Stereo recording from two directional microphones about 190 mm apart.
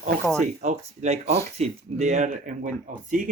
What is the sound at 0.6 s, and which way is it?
Speech, 35° right (ahead or behind).